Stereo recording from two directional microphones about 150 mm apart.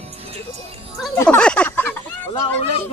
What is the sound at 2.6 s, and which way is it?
Speech, 40° left (ahead or behind).